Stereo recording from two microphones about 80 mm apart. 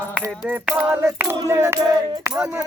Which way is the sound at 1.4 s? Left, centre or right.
Right.